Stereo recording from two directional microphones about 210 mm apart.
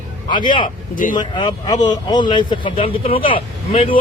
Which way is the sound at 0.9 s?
40° left (ahead or behind).